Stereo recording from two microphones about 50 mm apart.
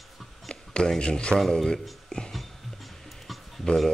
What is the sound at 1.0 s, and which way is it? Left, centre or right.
Speech, left.